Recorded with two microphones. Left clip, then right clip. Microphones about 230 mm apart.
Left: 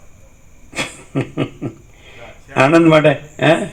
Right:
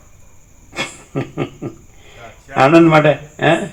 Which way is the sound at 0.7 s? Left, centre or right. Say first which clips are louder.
Left 1 dB; left.